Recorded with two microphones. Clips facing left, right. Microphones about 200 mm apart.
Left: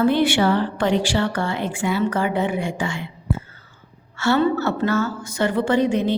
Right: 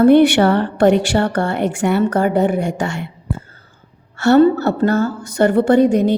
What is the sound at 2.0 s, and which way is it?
Speech, 45° right (ahead or behind).